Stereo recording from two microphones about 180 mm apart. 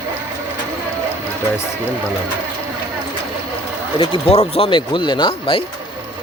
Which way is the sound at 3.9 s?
30° left (ahead or behind).